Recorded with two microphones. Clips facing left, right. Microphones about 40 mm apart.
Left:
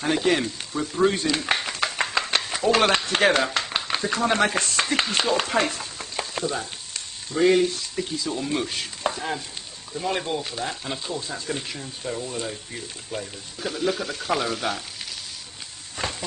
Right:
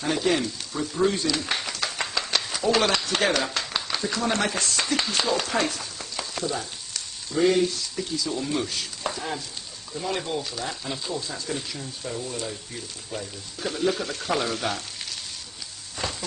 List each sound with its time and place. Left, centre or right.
0.0 s speech: left
1.1 s a sound: left
3.6 s speech: left
8.6 s chopping: left
9.9 s speech: left
11.1 s speech: left
13.1 s speech: centre
16.0 s a sound: left